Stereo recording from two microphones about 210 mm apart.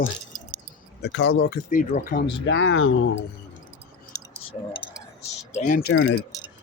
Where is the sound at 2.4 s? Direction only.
60° left (ahead or behind).